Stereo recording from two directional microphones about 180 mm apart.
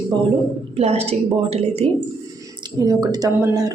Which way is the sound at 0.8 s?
35° right (ahead or behind).